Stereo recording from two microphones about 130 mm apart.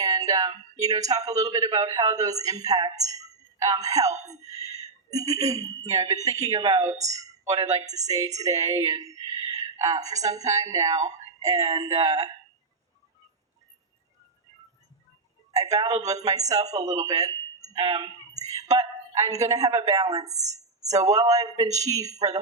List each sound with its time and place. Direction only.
0.0 s a woman's voice: 30° right (ahead or behind)
5.1 s a woman's voice: 25° right (ahead or behind)
15.7 s a woman's voice: 30° right (ahead or behind)